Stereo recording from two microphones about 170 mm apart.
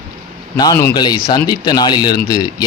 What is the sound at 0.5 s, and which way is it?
Speech, 20° left (ahead or behind).